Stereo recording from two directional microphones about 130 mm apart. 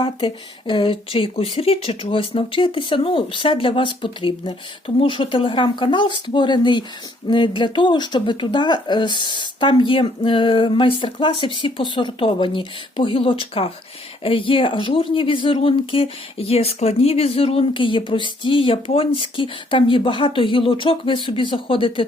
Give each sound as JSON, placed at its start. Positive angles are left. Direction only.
{"t": 0.0, "sound": "speech", "side_deg": 40}